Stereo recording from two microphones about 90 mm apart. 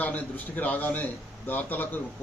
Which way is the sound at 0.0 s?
20° left (ahead or behind).